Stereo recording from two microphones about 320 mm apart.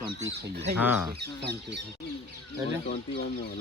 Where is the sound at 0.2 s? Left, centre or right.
Right.